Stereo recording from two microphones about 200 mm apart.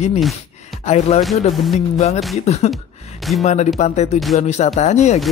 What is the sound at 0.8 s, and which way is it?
Speech, 35° left (ahead or behind).